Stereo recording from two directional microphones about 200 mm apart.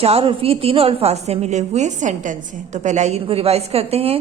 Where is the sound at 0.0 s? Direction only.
30° right (ahead or behind).